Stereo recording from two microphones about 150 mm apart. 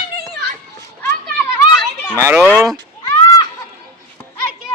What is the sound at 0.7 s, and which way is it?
Children playing, 15° left (ahead or behind).